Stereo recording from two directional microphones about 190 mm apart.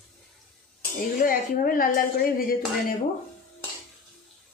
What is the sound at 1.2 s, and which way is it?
Speech, 50° left (ahead or behind).